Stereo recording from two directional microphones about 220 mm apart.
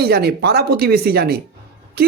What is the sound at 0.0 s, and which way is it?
Speech, 45° right (ahead or behind).